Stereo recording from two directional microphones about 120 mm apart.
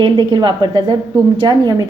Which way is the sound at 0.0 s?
40° right (ahead or behind).